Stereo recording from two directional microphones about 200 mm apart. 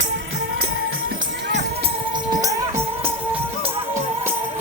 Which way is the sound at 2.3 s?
15° right (ahead or behind).